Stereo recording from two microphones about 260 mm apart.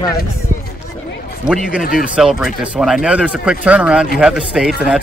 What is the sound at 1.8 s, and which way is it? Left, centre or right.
Speech, left.